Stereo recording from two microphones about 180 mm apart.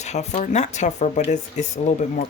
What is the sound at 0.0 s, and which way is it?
Speech, 40° left (ahead or behind).